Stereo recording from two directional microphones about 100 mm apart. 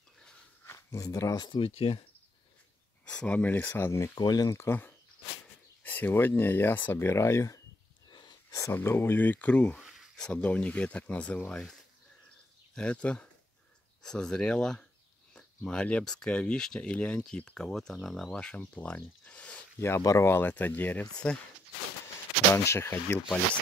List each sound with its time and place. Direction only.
0.7 s speech: 30° left (ahead or behind)
1.4 s speech: 60° left (ahead or behind)
3.1 s speech: 10° left (ahead or behind)
4.1 s speech: 45° left (ahead or behind)
4.6 s speech: 20° left (ahead or behind)
8.1 s a sound: 45° left (ahead or behind)
8.7 s speech: 25° left (ahead or behind)
9.8 s a sound: centre (ahead or behind)
10.1 s speech: 10° left (ahead or behind)
12.7 s speech: 10° left (ahead or behind)
19.2 s a sound: 15° left (ahead or behind)
20.0 s speech: 30° left (ahead or behind); by 21.4 s 10° left (ahead or behind)
22.5 s speech: 25° left (ahead or behind)